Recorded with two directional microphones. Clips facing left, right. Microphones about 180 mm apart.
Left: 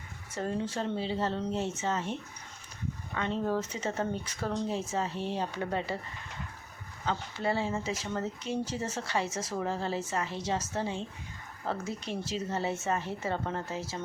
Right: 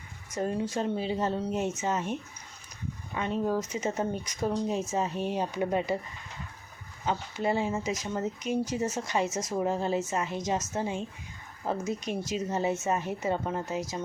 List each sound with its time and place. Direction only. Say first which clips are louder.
0.3 s speech: right 3 dB; 15° right (ahead or behind)
3.2 s speech: right 2 dB; 10° right (ahead or behind)
7.0 s speech: right 2 dB; 15° right (ahead or behind)